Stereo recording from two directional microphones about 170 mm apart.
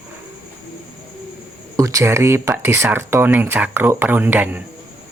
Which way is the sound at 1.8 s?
20° right (ahead or behind).